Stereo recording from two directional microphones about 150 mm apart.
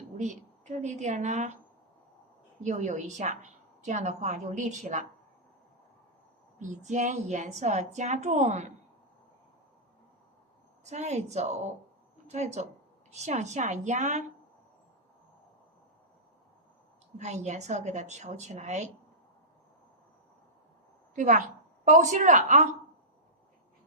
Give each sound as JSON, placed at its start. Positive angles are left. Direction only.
{"t": 0.2, "sound": "a woman's voice", "side_deg": -50}
{"t": 2.6, "sound": "a woman's voice", "side_deg": -55}
{"t": 6.6, "sound": "a woman's voice", "side_deg": -55}
{"t": 10.8, "sound": "a woman's voice", "side_deg": -50}
{"t": 17.2, "sound": "a woman's voice", "side_deg": -50}
{"t": 21.2, "sound": "a woman's voice", "side_deg": -60}